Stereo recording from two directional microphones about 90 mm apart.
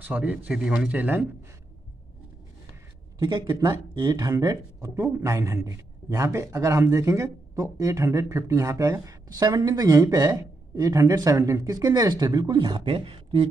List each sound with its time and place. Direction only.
0.0 s speech: 15° right (ahead or behind)
3.2 s a man's voice: 50° right (ahead or behind); by 13.5 s 85° right